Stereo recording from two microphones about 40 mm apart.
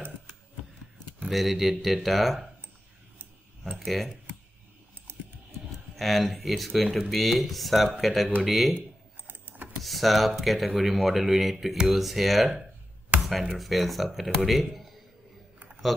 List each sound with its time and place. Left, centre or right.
1.3 s speech: centre
3.7 s typing: centre
5.1 s a sound: right
5.9 s speech: centre
9.3 s keys jangling: right
9.8 s speech: centre
13.2 s a sound: centre
13.6 s a man's voice: centre